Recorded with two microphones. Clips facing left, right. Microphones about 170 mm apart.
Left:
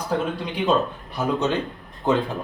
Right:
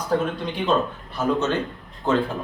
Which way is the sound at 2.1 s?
15° left (ahead or behind).